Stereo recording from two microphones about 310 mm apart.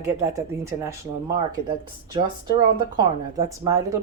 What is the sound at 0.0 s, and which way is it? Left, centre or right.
Speech, centre.